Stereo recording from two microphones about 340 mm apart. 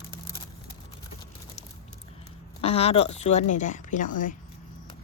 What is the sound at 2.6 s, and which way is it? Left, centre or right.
Speech, centre.